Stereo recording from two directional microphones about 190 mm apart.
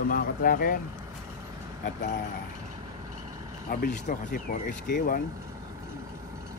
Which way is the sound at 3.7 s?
50° left (ahead or behind).